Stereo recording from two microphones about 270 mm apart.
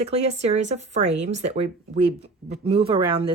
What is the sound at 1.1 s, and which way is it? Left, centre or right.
Speech, right.